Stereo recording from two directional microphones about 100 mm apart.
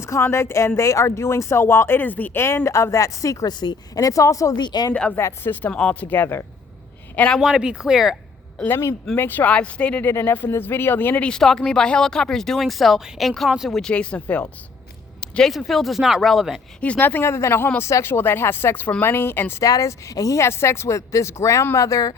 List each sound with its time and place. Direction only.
0.0 s a woman's voice: 25° left (ahead or behind); by 4.9 s 45° left (ahead or behind)
5.1 s speech: 25° left (ahead or behind)
5.7 s speech: 10° left (ahead or behind)
7.2 s speech: 10° left (ahead or behind)
7.4 s speech: 5° right (ahead or behind)
8.6 s speech: 25° left (ahead or behind)
10.1 s speech: 20° left (ahead or behind); by 16.6 s centre (ahead or behind)
16.8 s speech: 15° left (ahead or behind); by 22.1 s 35° left (ahead or behind)